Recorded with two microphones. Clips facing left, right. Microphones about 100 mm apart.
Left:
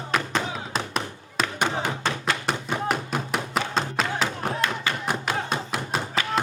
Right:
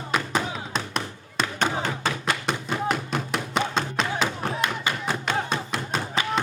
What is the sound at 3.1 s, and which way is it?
Music, 5° left (ahead or behind).